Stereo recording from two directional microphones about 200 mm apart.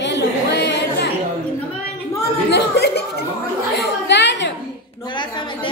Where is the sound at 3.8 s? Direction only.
60° left (ahead or behind).